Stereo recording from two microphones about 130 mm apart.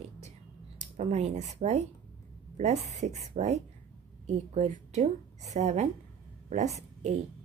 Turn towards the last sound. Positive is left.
turn(degrees=-60)  # may be behind; listen again after turning